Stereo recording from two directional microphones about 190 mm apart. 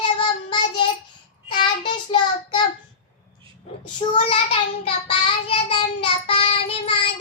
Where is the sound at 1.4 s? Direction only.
25° left (ahead or behind).